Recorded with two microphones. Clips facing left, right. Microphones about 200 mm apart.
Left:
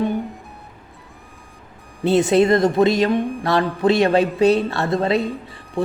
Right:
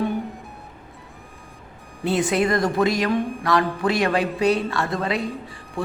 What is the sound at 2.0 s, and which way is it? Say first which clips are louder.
A woman's voice: left 6 dB; 25° left (ahead or behind).